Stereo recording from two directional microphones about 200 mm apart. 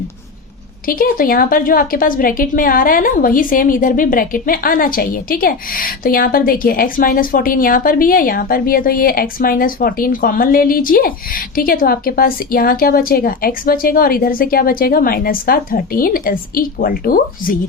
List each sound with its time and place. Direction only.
0.9 s a woman's voice: 45° left (ahead or behind)